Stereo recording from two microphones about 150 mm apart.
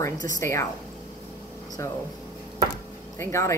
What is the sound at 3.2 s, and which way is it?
Speech, 20° left (ahead or behind).